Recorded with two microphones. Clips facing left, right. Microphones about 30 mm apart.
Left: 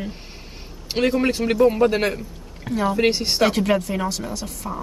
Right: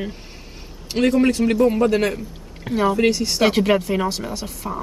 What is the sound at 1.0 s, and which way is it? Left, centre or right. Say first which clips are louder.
Speech: right 3 dB; centre.